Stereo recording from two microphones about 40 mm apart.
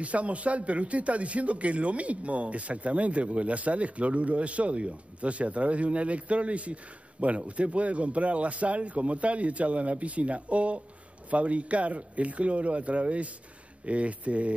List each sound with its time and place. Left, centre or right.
0.0 s a man's voice: right